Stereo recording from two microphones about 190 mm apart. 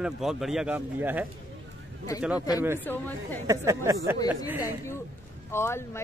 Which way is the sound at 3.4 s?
15° right (ahead or behind).